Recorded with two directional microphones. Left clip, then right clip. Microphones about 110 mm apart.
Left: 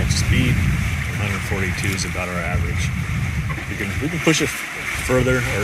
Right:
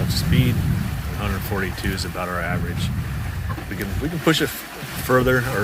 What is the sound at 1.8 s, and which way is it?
Speech, 10° left (ahead or behind).